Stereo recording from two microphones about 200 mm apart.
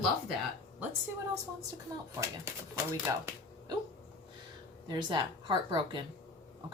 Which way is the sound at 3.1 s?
15° right (ahead or behind).